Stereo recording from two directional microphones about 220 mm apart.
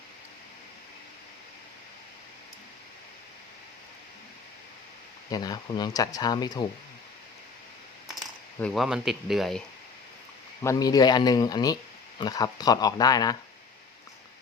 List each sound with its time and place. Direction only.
5.3 s speech: 20° left (ahead or behind)
8.6 s speech: centre (ahead or behind)
10.6 s speech: 15° left (ahead or behind)